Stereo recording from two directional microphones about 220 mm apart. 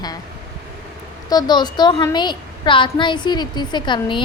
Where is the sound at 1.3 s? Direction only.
20° left (ahead or behind).